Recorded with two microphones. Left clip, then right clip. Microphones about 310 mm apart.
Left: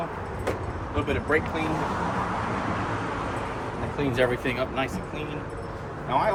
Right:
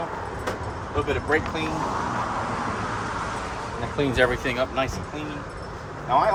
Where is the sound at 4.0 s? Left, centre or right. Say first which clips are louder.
Right 3 dB; right.